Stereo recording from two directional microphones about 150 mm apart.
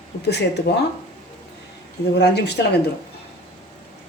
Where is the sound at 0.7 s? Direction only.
90° left.